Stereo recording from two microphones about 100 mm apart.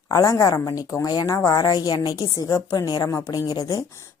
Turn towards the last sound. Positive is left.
turn(degrees=35)  # may be behind; listen again after turning